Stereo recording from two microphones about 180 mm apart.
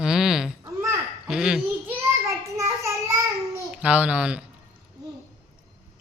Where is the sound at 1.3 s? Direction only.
5° right (ahead or behind).